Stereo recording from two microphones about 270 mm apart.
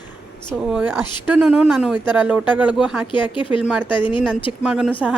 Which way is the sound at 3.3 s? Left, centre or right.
Centre.